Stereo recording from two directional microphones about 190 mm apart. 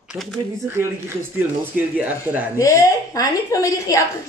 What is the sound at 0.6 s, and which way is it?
Speech, 15° right (ahead or behind).